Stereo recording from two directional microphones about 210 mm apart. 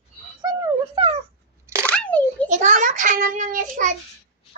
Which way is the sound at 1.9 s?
5° left (ahead or behind).